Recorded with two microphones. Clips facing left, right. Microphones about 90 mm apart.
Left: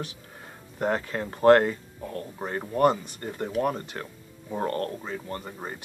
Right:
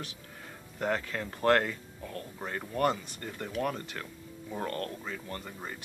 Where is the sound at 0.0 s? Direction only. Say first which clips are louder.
Left 5 dB; 25° left (ahead or behind).